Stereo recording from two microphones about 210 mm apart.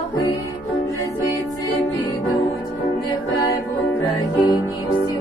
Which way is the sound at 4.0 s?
15° left (ahead or behind).